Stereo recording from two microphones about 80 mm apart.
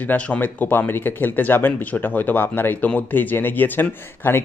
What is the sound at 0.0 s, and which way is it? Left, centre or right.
A man's voice, centre.